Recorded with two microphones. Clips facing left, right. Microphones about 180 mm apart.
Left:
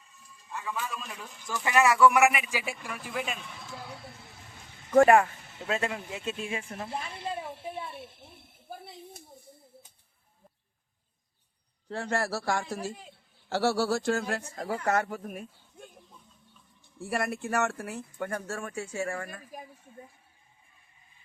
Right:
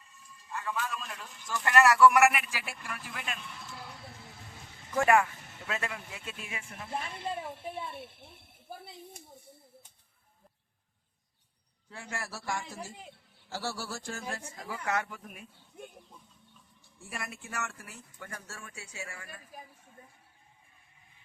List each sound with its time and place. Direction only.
0.0 s speech: centre (ahead or behind)
5.0 s speech: 35° left (ahead or behind)
7.4 s speech: centre (ahead or behind)
11.9 s speech: 70° left (ahead or behind); by 15.4 s 45° left (ahead or behind)
17.1 s speech: 65° left (ahead or behind)